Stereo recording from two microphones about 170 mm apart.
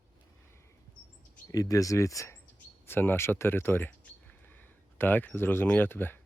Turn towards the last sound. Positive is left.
turn(degrees=10)  # may be behind; listen again after turning